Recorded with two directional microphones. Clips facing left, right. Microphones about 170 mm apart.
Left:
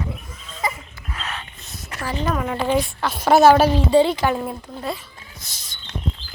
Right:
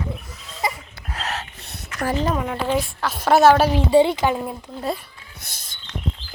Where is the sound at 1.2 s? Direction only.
70° right (ahead or behind).